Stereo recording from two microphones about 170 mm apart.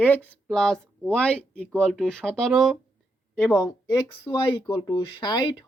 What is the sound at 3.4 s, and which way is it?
Speech, 15° left (ahead or behind).